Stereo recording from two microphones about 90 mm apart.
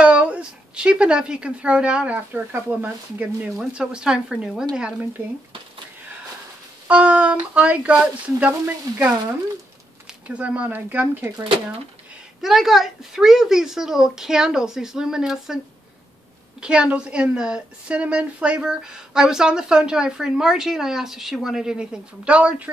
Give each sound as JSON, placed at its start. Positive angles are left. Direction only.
{"t": 0.0, "sound": "a woman's voice", "side_deg": -15}
{"t": 6.9, "sound": "a woman's voice", "side_deg": -15}
{"t": 10.2, "sound": "a woman's voice", "side_deg": -15}
{"t": 12.4, "sound": "speech", "side_deg": -5}
{"t": 16.6, "sound": "a woman's voice", "side_deg": -10}